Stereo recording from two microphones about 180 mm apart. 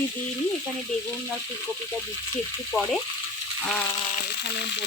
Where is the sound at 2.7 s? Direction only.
Centre (ahead or behind).